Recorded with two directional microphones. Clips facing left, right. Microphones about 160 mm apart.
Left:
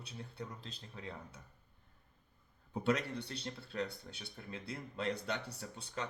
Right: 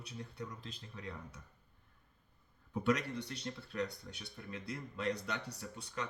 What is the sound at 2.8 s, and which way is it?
Speech, 30° left (ahead or behind).